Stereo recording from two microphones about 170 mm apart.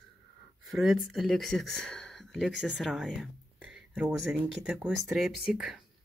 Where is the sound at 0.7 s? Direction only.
Centre (ahead or behind).